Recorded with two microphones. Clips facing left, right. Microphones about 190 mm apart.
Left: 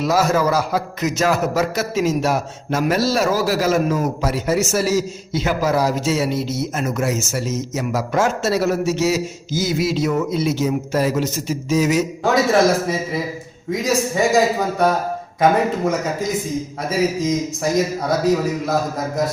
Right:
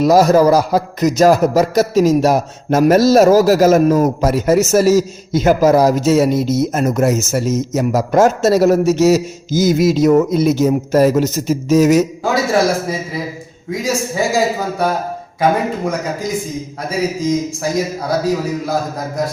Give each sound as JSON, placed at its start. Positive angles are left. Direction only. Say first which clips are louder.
{"t": 0.0, "sound": "a man's voice", "louder": "right 7 dB", "side_deg": -40}
{"t": 12.2, "sound": "a man's voice", "louder": "even", "side_deg": 0}
{"t": 16.9, "sound": "a man's voice", "louder": "right 2 dB", "side_deg": 0}